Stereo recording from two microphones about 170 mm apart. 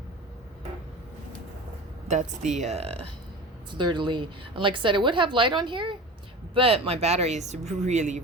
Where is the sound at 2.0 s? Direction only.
45° right (ahead or behind).